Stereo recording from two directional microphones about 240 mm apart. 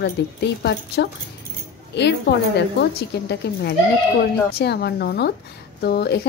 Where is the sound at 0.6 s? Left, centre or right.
Left.